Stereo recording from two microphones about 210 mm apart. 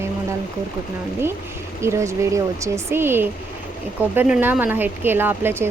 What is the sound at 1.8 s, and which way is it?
Speech, 15° right (ahead or behind).